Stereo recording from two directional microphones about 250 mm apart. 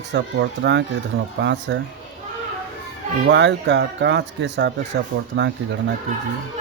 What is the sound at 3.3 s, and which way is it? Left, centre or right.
Speech, right.